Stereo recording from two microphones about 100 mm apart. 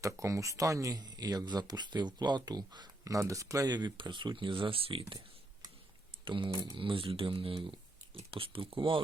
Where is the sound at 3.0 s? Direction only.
35° right (ahead or behind).